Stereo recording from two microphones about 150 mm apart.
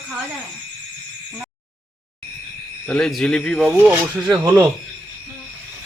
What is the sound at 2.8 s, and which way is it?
Speech, 5° left (ahead or behind).